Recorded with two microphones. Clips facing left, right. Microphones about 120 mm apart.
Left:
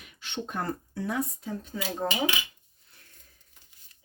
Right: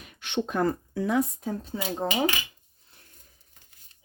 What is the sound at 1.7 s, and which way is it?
Speech, 30° right (ahead or behind).